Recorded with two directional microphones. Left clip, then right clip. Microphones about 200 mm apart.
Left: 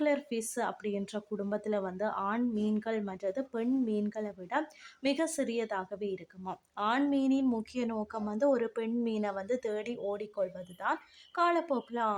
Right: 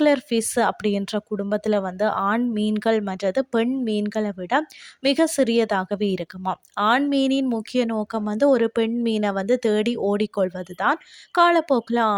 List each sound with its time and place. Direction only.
0.0 s a woman's voice: 45° right (ahead or behind)